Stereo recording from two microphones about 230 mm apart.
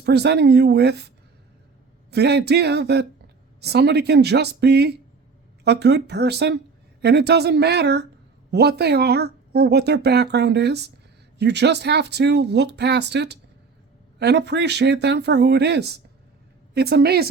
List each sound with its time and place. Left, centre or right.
0.0 s speech: right